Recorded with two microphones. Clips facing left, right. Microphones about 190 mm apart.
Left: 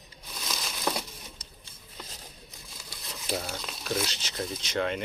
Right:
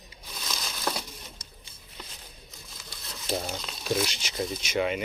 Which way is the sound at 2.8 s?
10° left (ahead or behind).